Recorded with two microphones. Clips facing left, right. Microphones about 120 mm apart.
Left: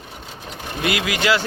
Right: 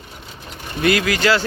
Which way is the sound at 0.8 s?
15° left (ahead or behind).